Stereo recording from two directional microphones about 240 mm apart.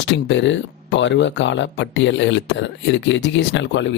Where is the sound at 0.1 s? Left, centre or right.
Left.